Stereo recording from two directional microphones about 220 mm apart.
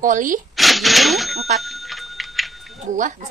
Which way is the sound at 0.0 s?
35° right (ahead or behind).